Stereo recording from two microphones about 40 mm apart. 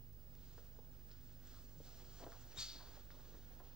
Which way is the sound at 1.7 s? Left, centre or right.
Centre.